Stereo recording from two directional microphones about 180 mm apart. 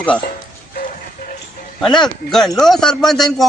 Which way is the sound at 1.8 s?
5° left (ahead or behind).